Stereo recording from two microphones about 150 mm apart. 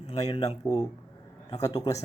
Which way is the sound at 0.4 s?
25° left (ahead or behind).